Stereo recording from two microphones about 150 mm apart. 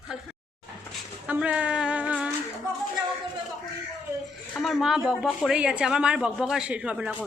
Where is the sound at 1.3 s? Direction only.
10° right (ahead or behind).